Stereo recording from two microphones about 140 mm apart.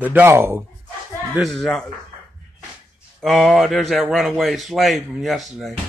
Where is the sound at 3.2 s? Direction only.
Centre (ahead or behind).